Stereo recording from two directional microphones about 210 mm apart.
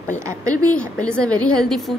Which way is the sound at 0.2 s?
15° right (ahead or behind).